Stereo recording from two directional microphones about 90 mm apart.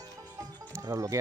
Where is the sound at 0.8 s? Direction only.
40° right (ahead or behind).